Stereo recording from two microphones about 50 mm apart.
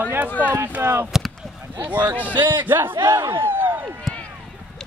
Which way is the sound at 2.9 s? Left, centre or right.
Right.